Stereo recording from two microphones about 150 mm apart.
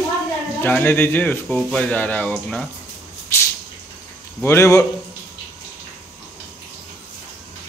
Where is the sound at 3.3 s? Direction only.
20° left (ahead or behind).